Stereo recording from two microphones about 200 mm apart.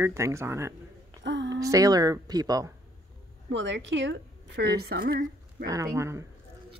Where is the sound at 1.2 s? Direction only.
65° right (ahead or behind).